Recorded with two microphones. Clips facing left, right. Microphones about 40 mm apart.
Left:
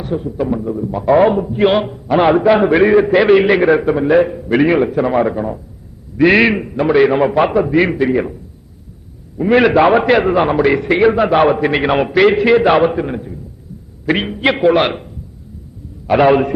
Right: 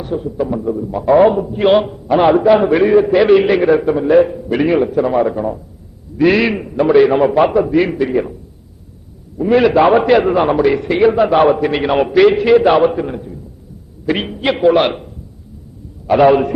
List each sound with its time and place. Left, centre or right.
0.0 s a man's voice: centre
6.3 s a man's voice: left
6.6 s a man's voice: centre
9.4 s a man's voice: left
9.7 s a man's voice: centre